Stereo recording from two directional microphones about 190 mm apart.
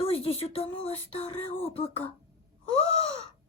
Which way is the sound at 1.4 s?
10° left (ahead or behind).